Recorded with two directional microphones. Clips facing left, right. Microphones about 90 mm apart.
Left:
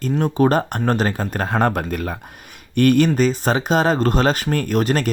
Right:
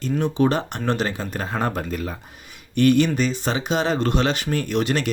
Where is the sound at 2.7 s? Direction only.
50° left (ahead or behind).